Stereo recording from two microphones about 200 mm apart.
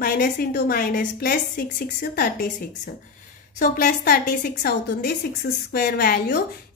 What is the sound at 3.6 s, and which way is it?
A woman's voice, 40° left (ahead or behind).